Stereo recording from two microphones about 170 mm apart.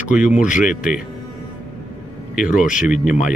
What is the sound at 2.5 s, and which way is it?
Speech, 50° left (ahead or behind).